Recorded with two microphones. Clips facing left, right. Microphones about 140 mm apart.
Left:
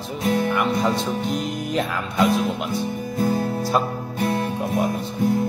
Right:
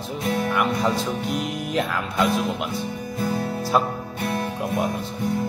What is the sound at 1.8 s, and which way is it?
Speech, centre (ahead or behind).